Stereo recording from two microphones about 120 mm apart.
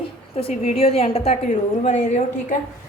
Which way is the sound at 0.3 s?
60° left (ahead or behind).